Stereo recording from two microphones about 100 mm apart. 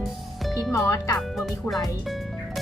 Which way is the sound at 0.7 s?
30° left (ahead or behind).